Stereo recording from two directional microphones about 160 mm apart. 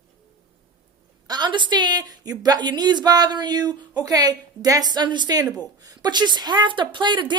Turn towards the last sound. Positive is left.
turn(degrees=-30)  # may be behind; listen again after turning